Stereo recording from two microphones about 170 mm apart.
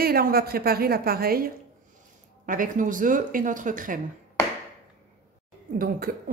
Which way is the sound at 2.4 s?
50° right (ahead or behind).